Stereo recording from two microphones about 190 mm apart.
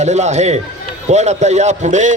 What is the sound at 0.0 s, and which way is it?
Speech, 35° right (ahead or behind).